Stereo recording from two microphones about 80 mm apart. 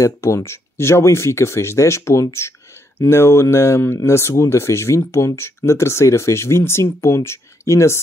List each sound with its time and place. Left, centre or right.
0.0 s speech: left